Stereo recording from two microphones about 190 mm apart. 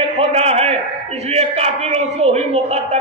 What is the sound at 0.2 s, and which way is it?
A man's voice, 35° right (ahead or behind).